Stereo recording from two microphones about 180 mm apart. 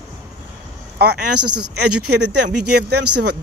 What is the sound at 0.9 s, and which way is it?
Speech, 60° right (ahead or behind).